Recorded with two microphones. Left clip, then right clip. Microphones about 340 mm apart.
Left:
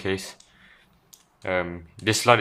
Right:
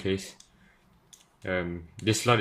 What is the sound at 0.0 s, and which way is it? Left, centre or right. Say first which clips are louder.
Speech: left 3 dB; centre.